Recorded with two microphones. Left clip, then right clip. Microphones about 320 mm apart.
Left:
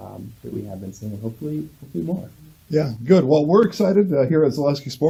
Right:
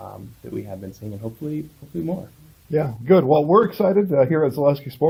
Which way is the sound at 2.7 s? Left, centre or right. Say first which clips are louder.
Even; right.